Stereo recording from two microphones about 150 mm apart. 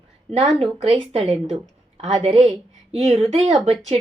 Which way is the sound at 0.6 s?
40° right (ahead or behind).